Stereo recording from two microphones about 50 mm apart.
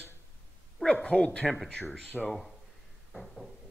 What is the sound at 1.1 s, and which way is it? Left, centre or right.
Speech, left.